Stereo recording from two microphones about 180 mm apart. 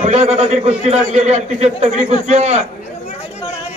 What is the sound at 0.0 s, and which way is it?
A man's voice, 40° right (ahead or behind).